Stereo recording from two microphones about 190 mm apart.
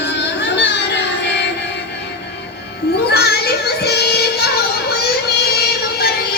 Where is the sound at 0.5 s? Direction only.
65° left (ahead or behind).